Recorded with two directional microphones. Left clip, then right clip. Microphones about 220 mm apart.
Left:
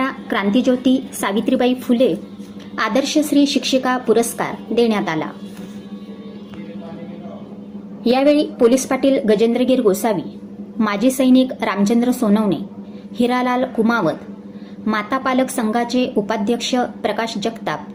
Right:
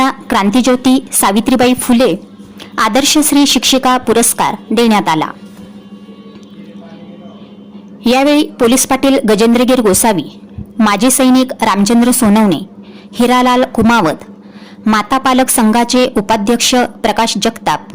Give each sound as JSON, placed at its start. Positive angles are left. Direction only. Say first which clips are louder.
{"t": 0.0, "sound": "speech", "louder": "right 8 dB", "side_deg": -50}
{"t": 8.0, "sound": "speech", "louder": "right 5 dB", "side_deg": -50}